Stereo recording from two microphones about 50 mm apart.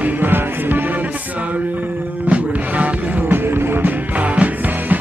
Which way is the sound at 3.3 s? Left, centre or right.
Right.